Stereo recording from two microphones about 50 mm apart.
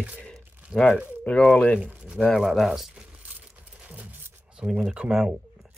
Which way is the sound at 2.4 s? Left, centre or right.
Centre.